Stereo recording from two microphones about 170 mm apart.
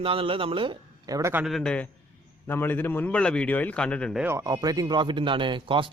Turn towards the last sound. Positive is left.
turn(degrees=-30)  # may be behind; listen again after turning